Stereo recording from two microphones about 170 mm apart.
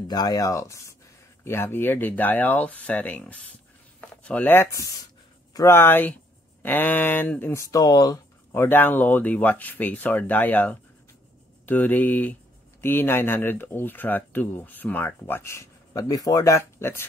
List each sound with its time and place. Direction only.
0.1 s speech: 20° left (ahead or behind)